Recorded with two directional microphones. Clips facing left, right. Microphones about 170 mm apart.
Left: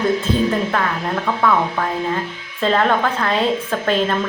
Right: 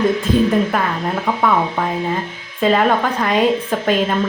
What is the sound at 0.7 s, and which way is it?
A woman's voice, 10° right (ahead or behind).